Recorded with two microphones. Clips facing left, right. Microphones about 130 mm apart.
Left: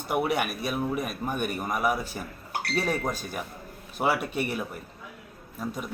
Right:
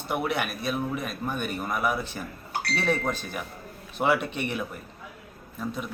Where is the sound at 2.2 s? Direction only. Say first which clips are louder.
Even; 20° left (ahead or behind).